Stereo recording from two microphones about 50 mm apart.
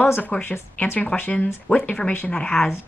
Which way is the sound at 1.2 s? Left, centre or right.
Left.